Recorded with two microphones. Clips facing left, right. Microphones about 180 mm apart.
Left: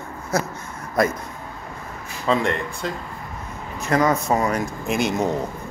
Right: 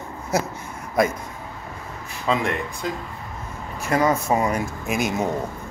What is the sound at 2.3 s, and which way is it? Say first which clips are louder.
Speech: left 2 dB; 5° right (ahead or behind).